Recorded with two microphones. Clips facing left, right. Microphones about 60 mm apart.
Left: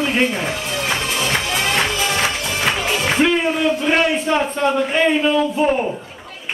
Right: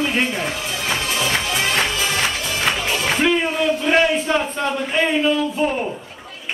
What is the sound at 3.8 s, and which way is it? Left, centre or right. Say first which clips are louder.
A man's voice: even; centre.